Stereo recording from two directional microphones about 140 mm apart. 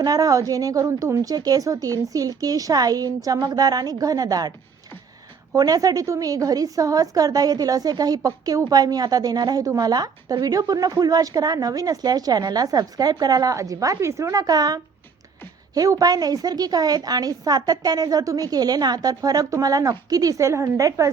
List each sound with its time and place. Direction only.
0.0 s a woman's voice: 25° right (ahead or behind)
5.5 s a woman's voice: 25° right (ahead or behind)